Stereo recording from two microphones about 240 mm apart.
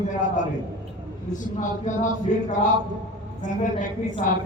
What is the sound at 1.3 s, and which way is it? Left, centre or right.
Speech, left.